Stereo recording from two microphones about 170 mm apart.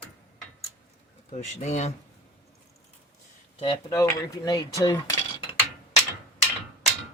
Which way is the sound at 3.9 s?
20° left (ahead or behind).